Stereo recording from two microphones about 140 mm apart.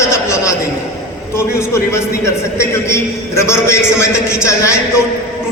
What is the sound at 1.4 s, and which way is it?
A man's voice, 20° left (ahead or behind).